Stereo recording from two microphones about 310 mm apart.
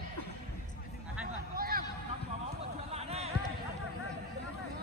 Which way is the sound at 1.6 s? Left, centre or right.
Right.